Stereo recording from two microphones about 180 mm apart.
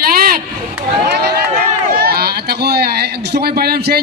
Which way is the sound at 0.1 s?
55° right (ahead or behind).